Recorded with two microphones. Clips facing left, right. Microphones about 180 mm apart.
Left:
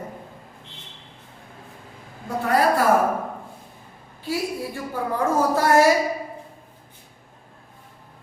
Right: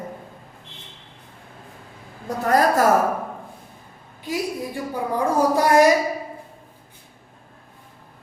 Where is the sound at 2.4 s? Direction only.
40° right (ahead or behind).